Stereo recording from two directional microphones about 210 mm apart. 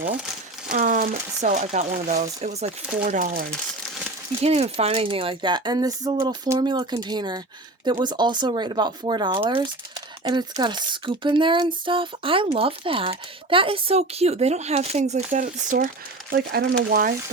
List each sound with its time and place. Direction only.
0.7 s speech: 40° right (ahead or behind)
16.3 s speech: 50° right (ahead or behind)